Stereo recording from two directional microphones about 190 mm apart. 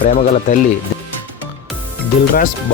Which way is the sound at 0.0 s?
45° left (ahead or behind).